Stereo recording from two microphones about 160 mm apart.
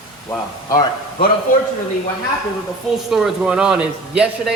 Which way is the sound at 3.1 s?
Centre (ahead or behind).